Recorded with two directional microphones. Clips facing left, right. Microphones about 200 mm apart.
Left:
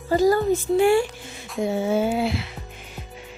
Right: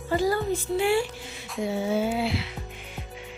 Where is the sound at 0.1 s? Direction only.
40° left (ahead or behind).